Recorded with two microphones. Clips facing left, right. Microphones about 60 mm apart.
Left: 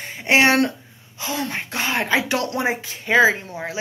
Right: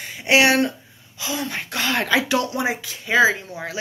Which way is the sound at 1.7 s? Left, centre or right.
Left.